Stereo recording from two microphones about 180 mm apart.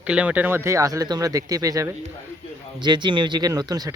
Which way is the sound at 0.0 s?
5° right (ahead or behind).